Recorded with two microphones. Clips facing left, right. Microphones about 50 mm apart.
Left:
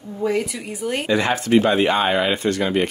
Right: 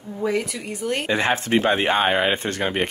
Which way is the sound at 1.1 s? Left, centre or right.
Right.